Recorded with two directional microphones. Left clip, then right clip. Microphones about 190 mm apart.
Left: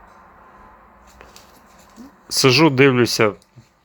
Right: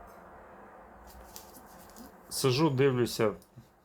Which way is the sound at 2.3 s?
30° left (ahead or behind).